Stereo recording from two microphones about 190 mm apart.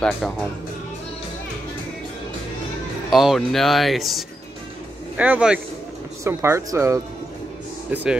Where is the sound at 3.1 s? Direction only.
Centre (ahead or behind).